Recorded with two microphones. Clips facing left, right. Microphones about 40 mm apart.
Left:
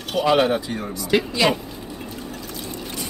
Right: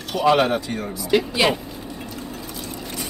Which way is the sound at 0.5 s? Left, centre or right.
Centre.